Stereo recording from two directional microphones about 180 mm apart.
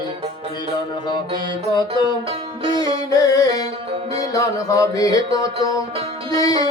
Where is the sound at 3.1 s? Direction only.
20° left (ahead or behind).